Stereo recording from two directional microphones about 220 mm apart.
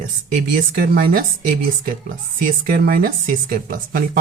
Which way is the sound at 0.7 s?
45° right (ahead or behind).